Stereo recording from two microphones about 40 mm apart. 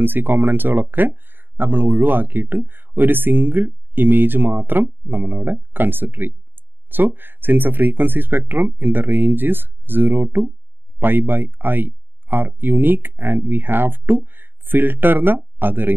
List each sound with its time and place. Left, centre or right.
0.0 s speech: right